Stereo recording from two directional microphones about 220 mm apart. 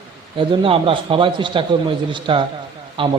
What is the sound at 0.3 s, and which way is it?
A man's voice, 25° right (ahead or behind).